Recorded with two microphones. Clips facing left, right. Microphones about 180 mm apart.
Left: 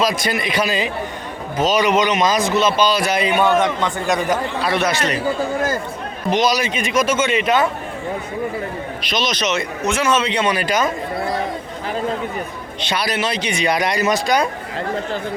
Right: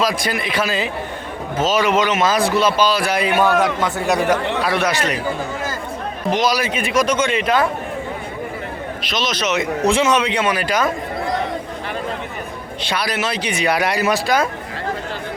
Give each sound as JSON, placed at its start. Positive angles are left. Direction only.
{"t": 0.4, "sound": "a man's voice", "side_deg": 15}
{"t": 1.6, "sound": "a man's voice", "side_deg": -5}
{"t": 2.2, "sound": "a man's voice", "side_deg": 15}
{"t": 2.6, "sound": "speech", "side_deg": -10}
{"t": 4.2, "sound": "speech", "side_deg": -75}
{"t": 4.6, "sound": "speech", "side_deg": -10}
{"t": 6.3, "sound": "a man's voice", "side_deg": -5}
{"t": 9.0, "sound": "a man's voice", "side_deg": -5}
{"t": 9.8, "sound": "a man's voice", "side_deg": -30}
{"t": 10.1, "sound": "speech", "side_deg": -10}
{"t": 13.1, "sound": "speech", "side_deg": -5}